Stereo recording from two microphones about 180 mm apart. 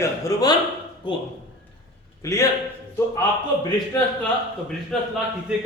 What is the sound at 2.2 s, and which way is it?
Speech, 15° left (ahead or behind).